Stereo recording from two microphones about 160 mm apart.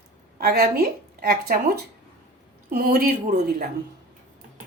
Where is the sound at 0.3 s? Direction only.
80° right.